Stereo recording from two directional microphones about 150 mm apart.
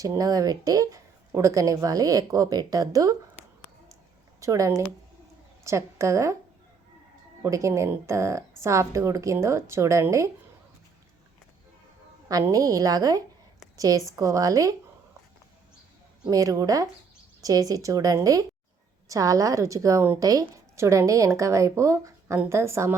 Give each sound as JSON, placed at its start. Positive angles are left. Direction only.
{"t": 0.0, "sound": "a woman's voice", "side_deg": -25}
{"t": 4.4, "sound": "a woman's voice", "side_deg": -20}
{"t": 7.4, "sound": "a woman's voice", "side_deg": -20}
{"t": 12.3, "sound": "a woman's voice", "side_deg": -25}
{"t": 16.2, "sound": "a woman's voice", "side_deg": -25}